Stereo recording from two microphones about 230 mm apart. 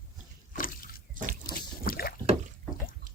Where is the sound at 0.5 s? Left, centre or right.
Left.